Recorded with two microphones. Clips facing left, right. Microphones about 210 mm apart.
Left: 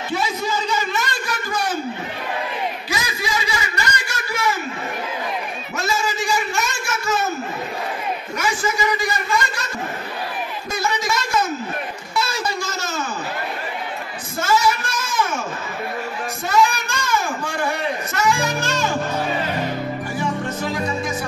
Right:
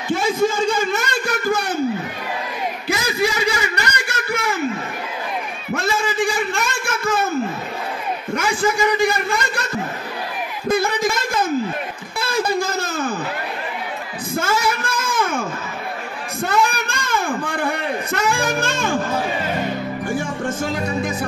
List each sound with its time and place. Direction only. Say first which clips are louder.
0.1 s a man's voice: right 6 dB; 50° right (ahead or behind)
2.9 s snicker: right 9 dB; 60° right (ahead or behind)
5.7 s a sound: right 3 dB; 55° right (ahead or behind)
8.4 s speech: right 4 dB; 55° right (ahead or behind)
10.7 s speech: right 5 dB; 55° right (ahead or behind)
14.3 s speech: left 1 dB; 55° right (ahead or behind)
16.4 s speech: left 1 dB; 55° right (ahead or behind)
20.4 s music: right 1 dB; 50° right (ahead or behind)